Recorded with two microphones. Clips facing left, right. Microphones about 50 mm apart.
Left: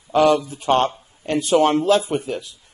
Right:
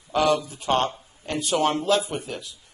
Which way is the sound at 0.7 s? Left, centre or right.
Left.